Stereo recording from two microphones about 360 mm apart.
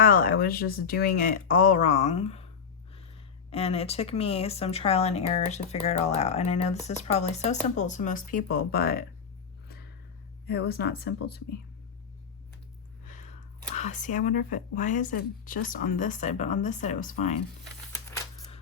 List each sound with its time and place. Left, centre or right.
0.0 s speech: left
3.5 s speech: centre
10.4 s speech: left
13.7 s speech: centre